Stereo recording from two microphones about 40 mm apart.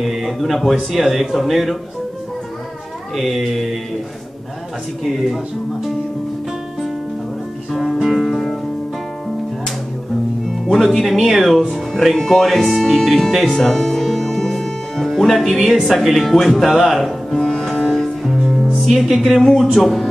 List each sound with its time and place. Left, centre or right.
0.0 s speech: centre
3.2 s speech: centre
7.7 s music: centre
10.7 s speech: centre
13.6 s music: centre
16.0 s speech: centre
17.3 s sitar: centre
17.8 s music: centre
18.9 s speech: centre